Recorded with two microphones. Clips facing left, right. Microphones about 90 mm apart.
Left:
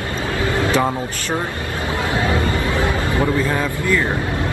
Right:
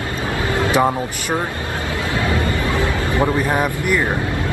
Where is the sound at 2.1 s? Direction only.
25° left (ahead or behind).